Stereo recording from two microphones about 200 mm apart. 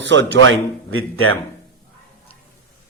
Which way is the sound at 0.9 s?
90° right.